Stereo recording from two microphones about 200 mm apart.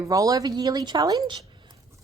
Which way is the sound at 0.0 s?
15° right (ahead or behind).